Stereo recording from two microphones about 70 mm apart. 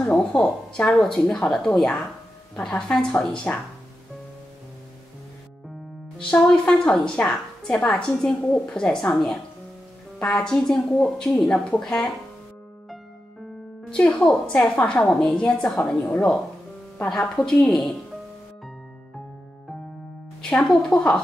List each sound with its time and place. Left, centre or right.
0.0 s a woman's voice: centre
6.1 s a woman's voice: centre
7.2 s a woman's voice: left
7.6 s a woman's voice: centre
13.8 s a woman's voice: centre
20.4 s a woman's voice: centre